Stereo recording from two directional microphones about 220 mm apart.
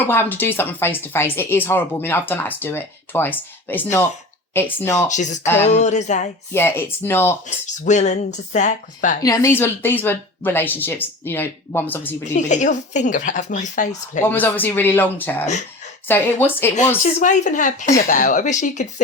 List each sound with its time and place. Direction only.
0.0 s speech: 10° left (ahead or behind)
5.0 s speech: 35° left (ahead or behind)
6.5 s speech: 10° left (ahead or behind)
7.4 s speech: 35° left (ahead or behind)
9.2 s speech: 15° left (ahead or behind)
12.2 s speech: 35° left (ahead or behind)
14.3 s speech: 10° left (ahead or behind)
17.0 s speech: 35° left (ahead or behind)